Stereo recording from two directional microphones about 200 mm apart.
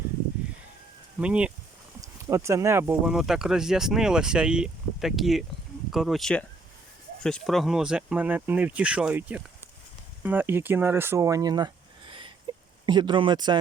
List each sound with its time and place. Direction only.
1.2 s speech: 5° right (ahead or behind); by 13.6 s 20° right (ahead or behind)